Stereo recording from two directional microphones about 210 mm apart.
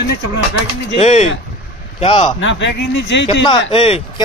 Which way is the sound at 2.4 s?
60° left (ahead or behind).